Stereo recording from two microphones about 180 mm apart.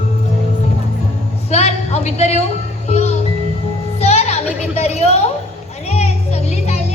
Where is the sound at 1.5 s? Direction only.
35° left (ahead or behind).